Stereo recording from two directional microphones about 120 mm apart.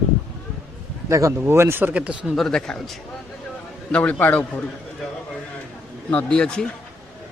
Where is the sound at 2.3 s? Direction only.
5° left (ahead or behind).